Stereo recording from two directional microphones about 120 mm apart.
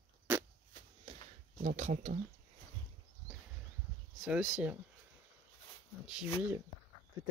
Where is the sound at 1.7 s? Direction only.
80° right.